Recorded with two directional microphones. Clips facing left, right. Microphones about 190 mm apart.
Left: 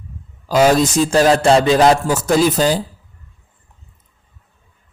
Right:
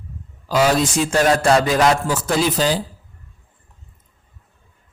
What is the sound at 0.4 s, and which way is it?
A man's voice, 40° left (ahead or behind).